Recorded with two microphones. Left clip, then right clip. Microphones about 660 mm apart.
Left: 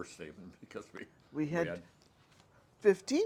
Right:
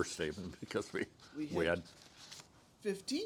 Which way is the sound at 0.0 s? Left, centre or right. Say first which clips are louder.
Right 8 dB; right.